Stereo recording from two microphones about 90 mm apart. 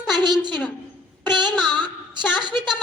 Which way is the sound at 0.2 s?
55° right (ahead or behind).